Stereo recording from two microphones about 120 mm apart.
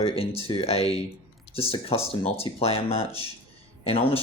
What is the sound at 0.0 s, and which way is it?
Speech, 55° left (ahead or behind).